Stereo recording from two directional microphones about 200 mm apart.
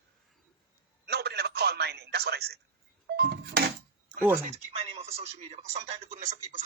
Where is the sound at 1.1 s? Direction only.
55° right (ahead or behind).